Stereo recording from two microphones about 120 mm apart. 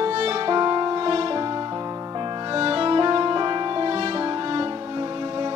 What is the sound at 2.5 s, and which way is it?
Music, 50° right (ahead or behind).